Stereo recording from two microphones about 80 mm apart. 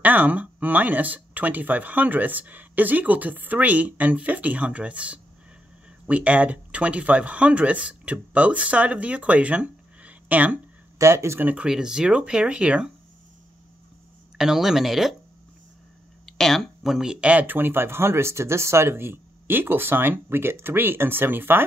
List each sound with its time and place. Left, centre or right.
0.0 s speech: centre
11.0 s speech: right
11.4 s speech: centre
14.4 s speech: centre
16.3 s speech: centre; by 21.6 s right